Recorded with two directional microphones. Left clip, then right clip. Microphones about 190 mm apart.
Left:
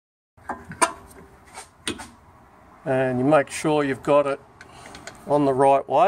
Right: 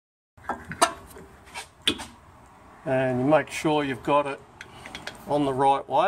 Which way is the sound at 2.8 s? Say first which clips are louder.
Left 2 dB; 50° left (ahead or behind).